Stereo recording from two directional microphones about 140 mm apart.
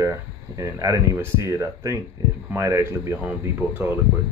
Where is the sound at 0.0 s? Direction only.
20° right (ahead or behind).